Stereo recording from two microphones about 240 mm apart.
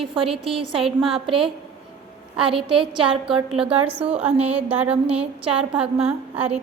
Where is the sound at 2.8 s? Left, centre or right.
Centre.